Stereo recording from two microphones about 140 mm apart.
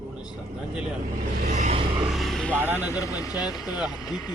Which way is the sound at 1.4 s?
60° right (ahead or behind).